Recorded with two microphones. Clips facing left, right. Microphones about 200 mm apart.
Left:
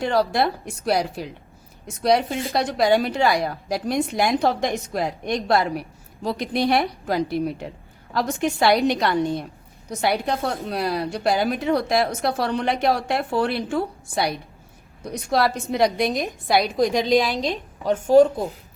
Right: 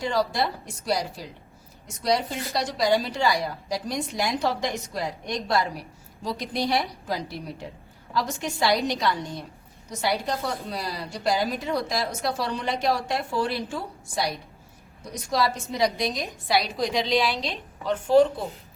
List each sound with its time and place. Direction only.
0.0 s a woman's voice: 60° left (ahead or behind)